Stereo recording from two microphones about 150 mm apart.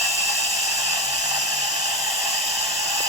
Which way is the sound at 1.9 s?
Centre (ahead or behind).